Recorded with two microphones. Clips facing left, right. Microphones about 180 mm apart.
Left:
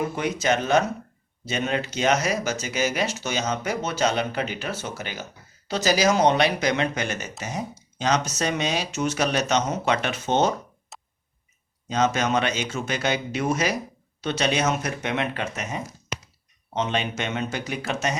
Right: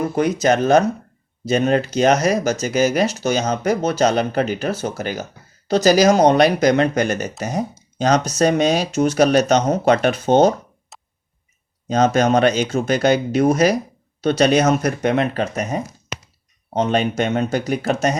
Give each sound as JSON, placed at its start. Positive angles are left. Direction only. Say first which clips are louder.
{"t": 0.0, "sound": "speech", "louder": "right 7 dB", "side_deg": -40}
{"t": 11.9, "sound": "speech", "louder": "right 7 dB", "side_deg": -35}